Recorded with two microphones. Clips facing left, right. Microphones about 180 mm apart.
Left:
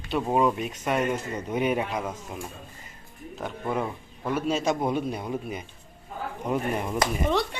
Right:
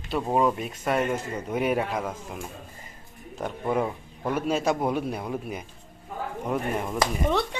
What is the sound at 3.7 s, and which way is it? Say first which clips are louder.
A man's voice: right 3 dB; 10° right (ahead or behind).